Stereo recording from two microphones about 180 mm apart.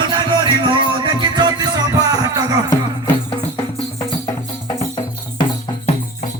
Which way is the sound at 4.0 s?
20° left (ahead or behind).